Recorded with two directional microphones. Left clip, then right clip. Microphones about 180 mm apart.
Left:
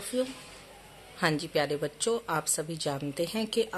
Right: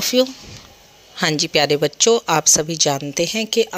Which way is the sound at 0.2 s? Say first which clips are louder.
Right 14 dB; 40° right (ahead or behind).